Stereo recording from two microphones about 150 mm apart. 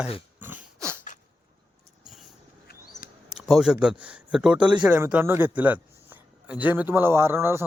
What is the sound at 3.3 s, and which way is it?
A man's voice, 5° right (ahead or behind).